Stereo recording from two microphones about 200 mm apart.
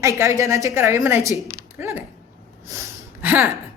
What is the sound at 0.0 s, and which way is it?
A woman's voice, 15° right (ahead or behind).